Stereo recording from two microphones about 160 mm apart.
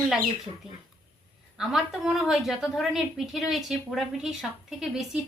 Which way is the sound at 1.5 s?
Centre (ahead or behind).